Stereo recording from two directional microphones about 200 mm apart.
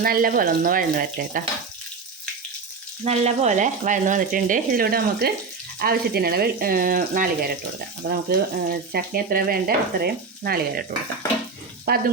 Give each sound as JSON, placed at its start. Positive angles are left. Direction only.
{"t": 0.0, "sound": "speech", "side_deg": -45}
{"t": 3.0, "sound": "speech", "side_deg": -30}
{"t": 11.9, "sound": "speech", "side_deg": -50}